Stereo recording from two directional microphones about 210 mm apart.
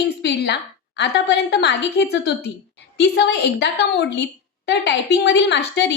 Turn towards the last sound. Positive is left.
turn(degrees=55)  # may be behind; listen again after turning